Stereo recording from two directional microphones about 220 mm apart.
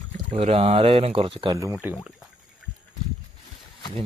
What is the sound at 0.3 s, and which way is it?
Speech, 25° right (ahead or behind).